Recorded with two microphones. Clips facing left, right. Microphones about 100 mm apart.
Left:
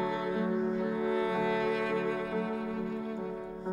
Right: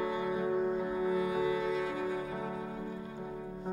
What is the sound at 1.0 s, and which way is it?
Music, 75° left (ahead or behind).